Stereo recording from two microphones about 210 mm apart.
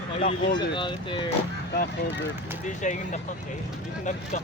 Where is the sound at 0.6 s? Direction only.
20° left (ahead or behind).